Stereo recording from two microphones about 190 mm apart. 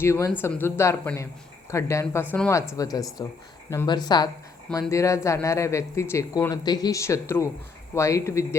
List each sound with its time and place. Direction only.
0.0 s speech: 15° left (ahead or behind)